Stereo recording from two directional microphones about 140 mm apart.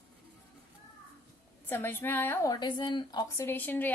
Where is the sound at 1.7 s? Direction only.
15° left (ahead or behind).